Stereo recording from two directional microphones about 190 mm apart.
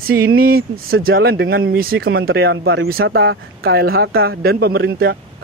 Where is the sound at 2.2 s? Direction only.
80° right.